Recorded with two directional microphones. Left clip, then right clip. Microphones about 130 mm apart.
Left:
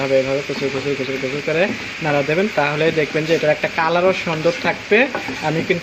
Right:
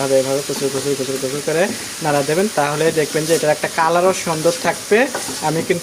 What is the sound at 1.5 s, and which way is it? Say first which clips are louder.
Speech: even; 40° right (ahead or behind).